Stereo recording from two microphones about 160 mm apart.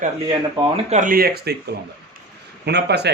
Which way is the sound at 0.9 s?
60° right (ahead or behind).